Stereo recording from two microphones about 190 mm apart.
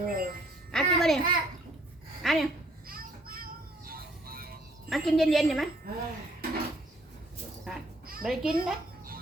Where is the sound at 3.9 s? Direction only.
50° right (ahead or behind).